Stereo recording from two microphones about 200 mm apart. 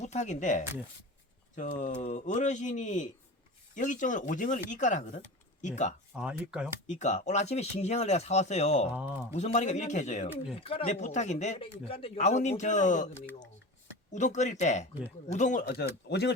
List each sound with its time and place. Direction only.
0.0 s speech: 35° left (ahead or behind)
6.1 s speech: 5° right (ahead or behind)
6.8 s speech: 35° left (ahead or behind)
8.9 s speech: 10° right (ahead or behind)
9.3 s speech: 35° left (ahead or behind)
14.1 s speech: 35° left (ahead or behind); by 16.3 s 55° left (ahead or behind)